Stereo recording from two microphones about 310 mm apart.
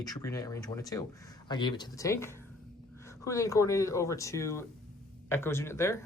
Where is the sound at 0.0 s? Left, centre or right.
Centre.